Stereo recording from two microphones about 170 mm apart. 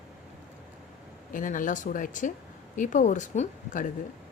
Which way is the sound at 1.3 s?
50° left (ahead or behind).